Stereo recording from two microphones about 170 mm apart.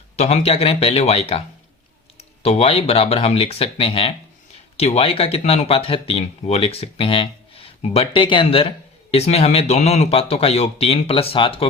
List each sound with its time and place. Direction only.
0.2 s speech: 40° left (ahead or behind)